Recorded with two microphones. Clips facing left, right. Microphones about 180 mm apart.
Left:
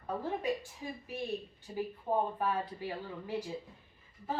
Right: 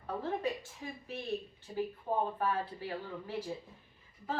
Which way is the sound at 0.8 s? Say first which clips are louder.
Left 2 dB; 10° left (ahead or behind).